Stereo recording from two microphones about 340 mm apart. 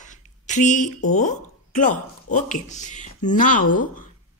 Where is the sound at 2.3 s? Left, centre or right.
Left.